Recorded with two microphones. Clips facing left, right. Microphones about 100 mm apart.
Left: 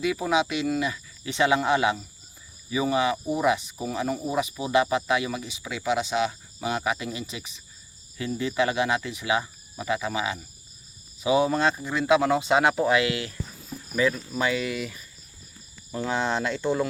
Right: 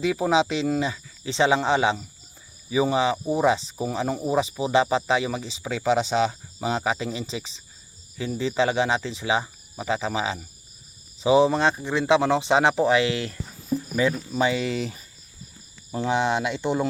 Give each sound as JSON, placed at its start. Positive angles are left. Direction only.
{"t": 0.0, "sound": "speech", "side_deg": -30}
{"t": 14.3, "sound": "speech", "side_deg": -25}
{"t": 15.9, "sound": "speech", "side_deg": -20}